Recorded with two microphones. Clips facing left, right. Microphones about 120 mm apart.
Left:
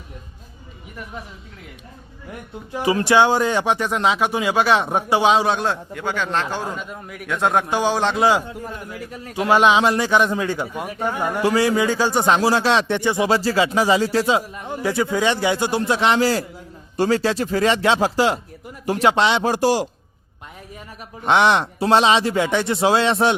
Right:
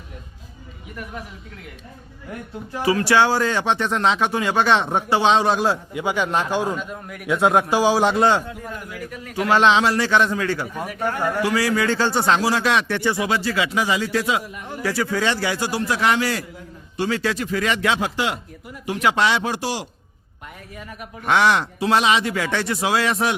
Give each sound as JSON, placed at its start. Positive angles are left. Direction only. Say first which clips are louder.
{"t": 2.8, "sound": "speech", "louder": "left 1 dB", "side_deg": 20}
{"t": 6.7, "sound": "a man's voice", "louder": "right 1 dB", "side_deg": 0}
{"t": 8.4, "sound": "a man's voice", "louder": "left 1 dB", "side_deg": 25}
{"t": 9.3, "sound": "a man's voice", "louder": "left 1 dB", "side_deg": 15}
{"t": 11.9, "sound": "speech", "louder": "left 1 dB", "side_deg": 10}
{"t": 12.4, "sound": "a man's voice", "louder": "left 2 dB", "side_deg": 30}
{"t": 13.2, "sound": "a man's voice", "louder": "left 4 dB", "side_deg": 30}
{"t": 19.4, "sound": "a man's voice", "louder": "left 7 dB", "side_deg": 45}
{"t": 21.2, "sound": "a man's voice", "louder": "left 2 dB", "side_deg": 25}